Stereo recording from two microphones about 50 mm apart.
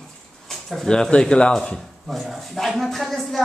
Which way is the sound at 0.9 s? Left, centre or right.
Centre.